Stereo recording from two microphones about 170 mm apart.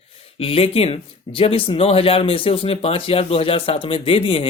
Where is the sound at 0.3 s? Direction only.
35° left (ahead or behind).